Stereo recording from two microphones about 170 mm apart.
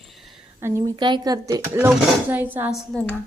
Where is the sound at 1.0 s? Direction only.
25° right (ahead or behind); by 2.7 s 10° right (ahead or behind).